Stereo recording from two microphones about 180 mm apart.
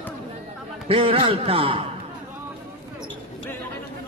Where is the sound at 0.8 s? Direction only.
30° right (ahead or behind).